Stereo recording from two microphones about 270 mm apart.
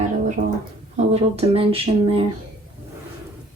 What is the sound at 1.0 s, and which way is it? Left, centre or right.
Speech, right.